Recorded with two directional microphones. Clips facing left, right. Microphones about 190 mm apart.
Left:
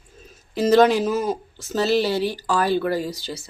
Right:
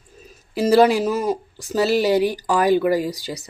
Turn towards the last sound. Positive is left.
turn(degrees=-15)  # may be behind; listen again after turning